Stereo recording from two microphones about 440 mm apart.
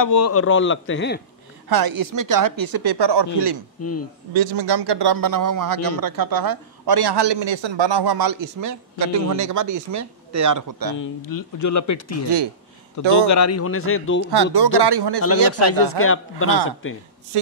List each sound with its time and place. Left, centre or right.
0.0 s speech: left
1.7 s a man's voice: right
3.8 s speech: left
4.3 s a man's voice: right
11.0 s speech: left
14.3 s speech: right
15.5 s speech: left